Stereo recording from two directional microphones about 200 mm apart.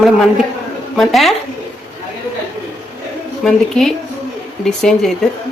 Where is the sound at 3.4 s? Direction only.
Centre (ahead or behind).